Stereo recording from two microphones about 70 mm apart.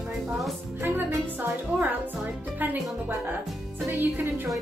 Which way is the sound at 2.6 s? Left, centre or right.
Right.